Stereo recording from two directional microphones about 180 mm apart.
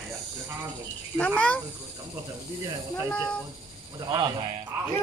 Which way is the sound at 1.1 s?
5° left (ahead or behind).